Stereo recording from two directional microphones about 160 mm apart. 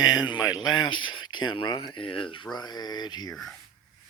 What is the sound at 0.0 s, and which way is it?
Speech, 25° left (ahead or behind).